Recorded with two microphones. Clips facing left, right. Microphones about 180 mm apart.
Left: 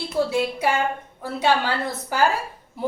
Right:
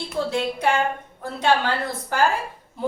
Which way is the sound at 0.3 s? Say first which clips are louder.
Even; 5° left (ahead or behind).